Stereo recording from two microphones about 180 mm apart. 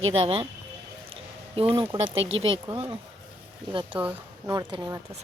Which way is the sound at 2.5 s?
30° right (ahead or behind).